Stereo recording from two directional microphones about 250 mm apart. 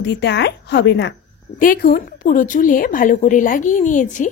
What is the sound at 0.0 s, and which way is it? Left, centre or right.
A woman's voice, left.